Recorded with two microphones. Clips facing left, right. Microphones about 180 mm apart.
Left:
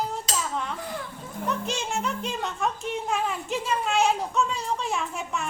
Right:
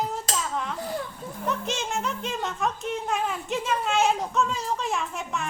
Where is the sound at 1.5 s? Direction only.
Centre (ahead or behind).